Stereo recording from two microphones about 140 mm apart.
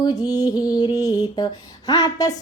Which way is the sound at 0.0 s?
25° left (ahead or behind).